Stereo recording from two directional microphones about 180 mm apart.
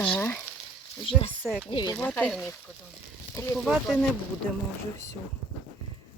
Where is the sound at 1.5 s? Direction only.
Centre (ahead or behind).